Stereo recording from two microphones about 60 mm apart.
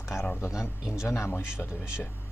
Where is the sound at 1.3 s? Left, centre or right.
Left.